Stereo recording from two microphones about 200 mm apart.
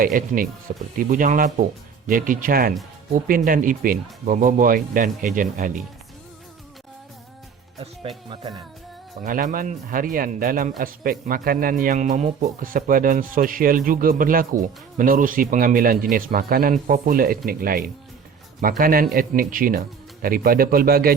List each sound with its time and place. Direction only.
0.0 s speech: 40° right (ahead or behind)
9.2 s speech: 45° right (ahead or behind)